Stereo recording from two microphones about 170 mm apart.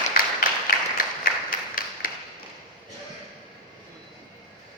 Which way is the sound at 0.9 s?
55° left (ahead or behind).